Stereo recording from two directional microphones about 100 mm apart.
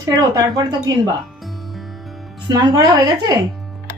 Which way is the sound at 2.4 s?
45° right (ahead or behind).